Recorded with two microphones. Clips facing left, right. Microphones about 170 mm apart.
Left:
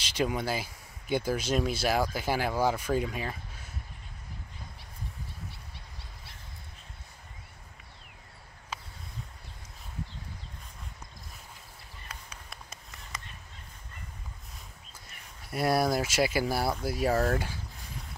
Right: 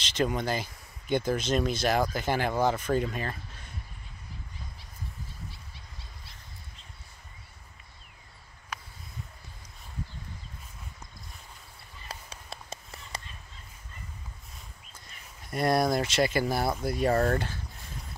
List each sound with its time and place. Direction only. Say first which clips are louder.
0.0 s speech: right 1 dB; 10° left (ahead or behind)
12.1 s a sound: right 5 dB; 30° right (ahead or behind)
15.5 s speech: right 1 dB; 5° left (ahead or behind)